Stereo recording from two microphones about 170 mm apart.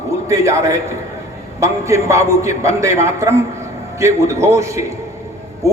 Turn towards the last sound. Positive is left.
turn(degrees=-15)  # may be behind; listen again after turning